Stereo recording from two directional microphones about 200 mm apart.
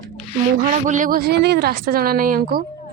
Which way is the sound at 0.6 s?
40° right (ahead or behind).